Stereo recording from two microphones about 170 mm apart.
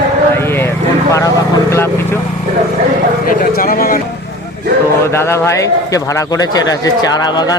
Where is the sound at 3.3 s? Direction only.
55° left (ahead or behind).